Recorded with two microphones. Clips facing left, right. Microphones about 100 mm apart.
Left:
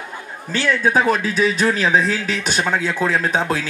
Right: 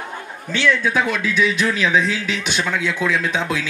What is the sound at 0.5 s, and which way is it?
A man's voice, 45° left (ahead or behind).